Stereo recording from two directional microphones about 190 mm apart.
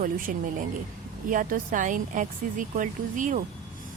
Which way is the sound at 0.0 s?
45° right (ahead or behind).